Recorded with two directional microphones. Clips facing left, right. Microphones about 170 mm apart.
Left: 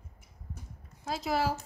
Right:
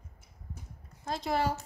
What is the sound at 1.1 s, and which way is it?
Speech, 5° left (ahead or behind).